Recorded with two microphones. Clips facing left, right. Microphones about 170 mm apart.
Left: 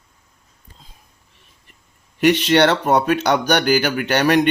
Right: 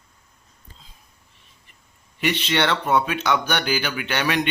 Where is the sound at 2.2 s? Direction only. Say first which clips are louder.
Left 8 dB; 45° left (ahead or behind).